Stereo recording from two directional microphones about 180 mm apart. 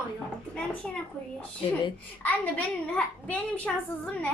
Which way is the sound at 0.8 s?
5° left (ahead or behind).